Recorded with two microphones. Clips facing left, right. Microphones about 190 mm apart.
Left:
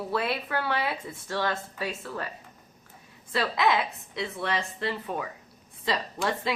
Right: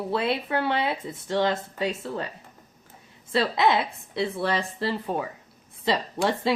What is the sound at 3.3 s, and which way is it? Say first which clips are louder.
A woman's voice: right 3 dB; 25° right (ahead or behind).